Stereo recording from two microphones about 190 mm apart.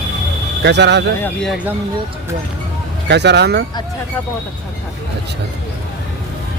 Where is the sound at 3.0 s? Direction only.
65° right (ahead or behind).